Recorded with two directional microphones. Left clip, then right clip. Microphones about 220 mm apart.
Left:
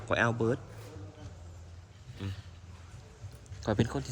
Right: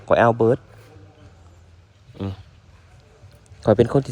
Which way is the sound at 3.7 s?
10° right (ahead or behind).